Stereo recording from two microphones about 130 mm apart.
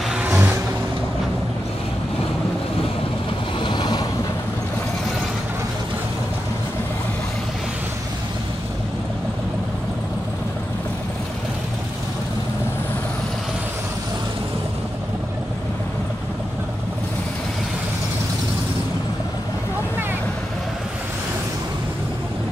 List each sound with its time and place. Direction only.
0.1 s vehicle: 10° right (ahead or behind)
3.6 s boat: 35° left (ahead or behind)